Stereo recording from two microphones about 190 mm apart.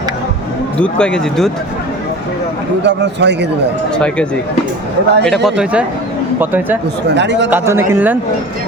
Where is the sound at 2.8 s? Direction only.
65° right (ahead or behind).